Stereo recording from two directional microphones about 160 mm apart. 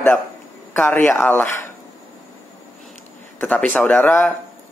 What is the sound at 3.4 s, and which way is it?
Speech, 10° left (ahead or behind).